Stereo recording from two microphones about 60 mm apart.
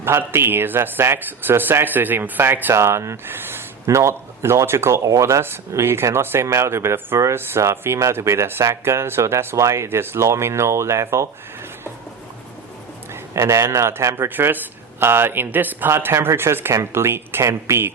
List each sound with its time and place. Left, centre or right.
0.0 s speech: right
2.7 s speech: right
3.2 s speech: right
3.8 s speech: right
5.0 s speech: right
13.3 s speech: right
14.3 s speech: right
15.9 s speech: right